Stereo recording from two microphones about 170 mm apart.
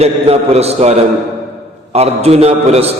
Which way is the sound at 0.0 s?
40° right (ahead or behind).